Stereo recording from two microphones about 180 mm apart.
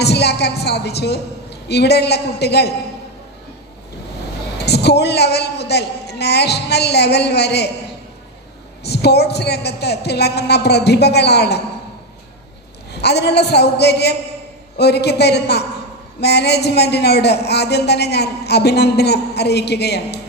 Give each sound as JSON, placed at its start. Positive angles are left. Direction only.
{"t": 0.0, "sound": "a woman's voice", "side_deg": 65}
{"t": 4.5, "sound": "a man's voice", "side_deg": 65}
{"t": 8.8, "sound": "a man's voice", "side_deg": 65}
{"t": 12.9, "sound": "a man's voice", "side_deg": 65}